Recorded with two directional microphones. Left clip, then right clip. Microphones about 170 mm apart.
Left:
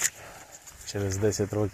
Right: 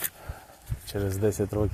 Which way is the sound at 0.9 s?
20° right (ahead or behind).